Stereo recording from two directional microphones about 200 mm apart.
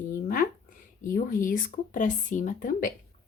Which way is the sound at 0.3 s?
40° left (ahead or behind).